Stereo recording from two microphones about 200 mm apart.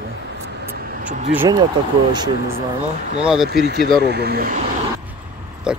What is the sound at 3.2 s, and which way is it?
Speech, 5° right (ahead or behind).